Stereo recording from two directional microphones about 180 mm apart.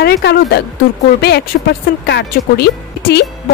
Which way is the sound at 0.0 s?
65° left (ahead or behind).